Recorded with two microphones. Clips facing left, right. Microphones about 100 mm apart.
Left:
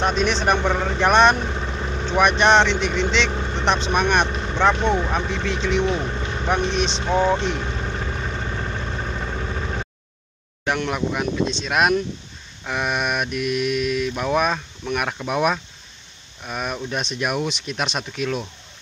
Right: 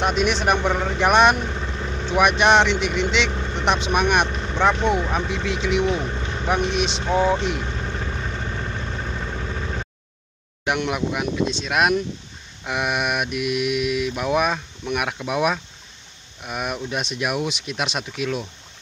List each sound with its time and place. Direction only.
0.0 s mantra: 10° right (ahead or behind)
1.4 s vehicle: 15° left (ahead or behind)
2.0 s mantra: 10° right (ahead or behind)
3.3 s vehicle: 15° left (ahead or behind)
3.5 s mantra: 10° right (ahead or behind)
4.3 s vehicle: 10° left (ahead or behind)
5.1 s mantra: 5° right (ahead or behind)
6.0 s vehicle: 10° left (ahead or behind)
6.4 s mantra: 5° right (ahead or behind)
7.6 s vehicle: 15° left (ahead or behind)
10.6 s speech: 15° right (ahead or behind)
12.6 s mantra: 10° right (ahead or behind)
16.4 s speech: 10° right (ahead or behind)